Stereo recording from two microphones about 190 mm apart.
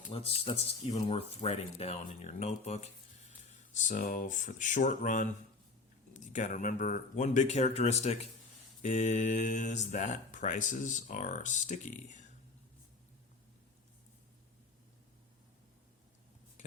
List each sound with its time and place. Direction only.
0.1 s speech: 30° left (ahead or behind)